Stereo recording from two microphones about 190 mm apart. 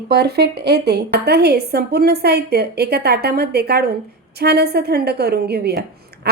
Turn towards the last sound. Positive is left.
turn(degrees=-60)  # may be behind; listen again after turning